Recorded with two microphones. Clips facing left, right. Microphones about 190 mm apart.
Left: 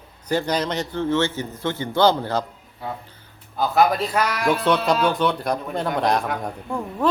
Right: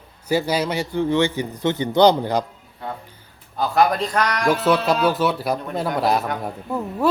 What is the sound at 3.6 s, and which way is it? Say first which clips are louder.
Speech: even; 5° left (ahead or behind).